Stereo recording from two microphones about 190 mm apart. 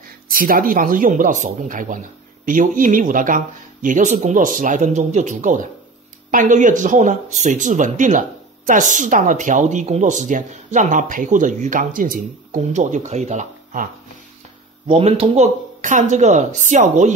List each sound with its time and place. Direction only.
0.3 s speech: 50° right (ahead or behind)
14.9 s speech: 30° right (ahead or behind)